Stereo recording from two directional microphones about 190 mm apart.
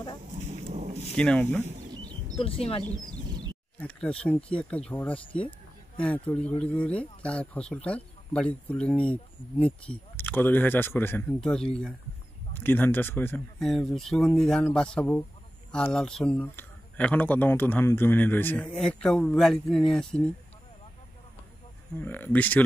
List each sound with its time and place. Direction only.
0.5 s thunder: 35° right (ahead or behind)
1.1 s speech: 5° left (ahead or behind)
1.9 s a sound: 20° right (ahead or behind)
2.3 s speech: 30° left (ahead or behind)
2.8 s a sound: 20° right (ahead or behind)
3.8 s speech: 5° left (ahead or behind)
13.6 s speech: centre (ahead or behind)
21.9 s speech: 10° left (ahead or behind)